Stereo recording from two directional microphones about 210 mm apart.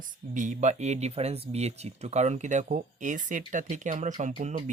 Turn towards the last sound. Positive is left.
turn(degrees=-35)  # may be behind; listen again after turning